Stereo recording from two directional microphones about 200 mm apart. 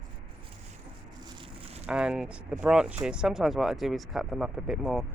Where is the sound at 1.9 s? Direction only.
5° right (ahead or behind).